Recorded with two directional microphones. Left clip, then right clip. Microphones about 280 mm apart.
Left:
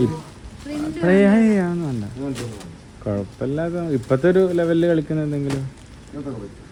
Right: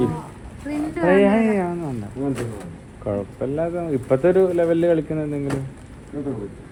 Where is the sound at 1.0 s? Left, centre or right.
Left.